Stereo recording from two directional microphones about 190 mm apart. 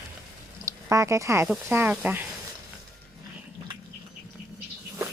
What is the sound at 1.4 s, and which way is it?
Speech, 10° right (ahead or behind).